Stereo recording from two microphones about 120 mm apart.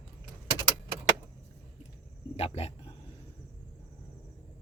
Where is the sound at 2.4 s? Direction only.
60° left (ahead or behind).